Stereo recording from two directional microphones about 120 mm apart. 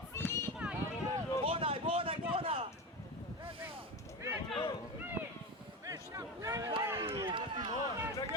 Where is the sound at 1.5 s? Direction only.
50° right (ahead or behind).